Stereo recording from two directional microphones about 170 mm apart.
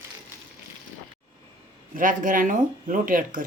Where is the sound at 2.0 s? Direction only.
50° right (ahead or behind).